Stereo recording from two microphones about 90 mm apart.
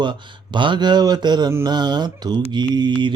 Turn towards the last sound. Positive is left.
turn(degrees=-60)  # may be behind; listen again after turning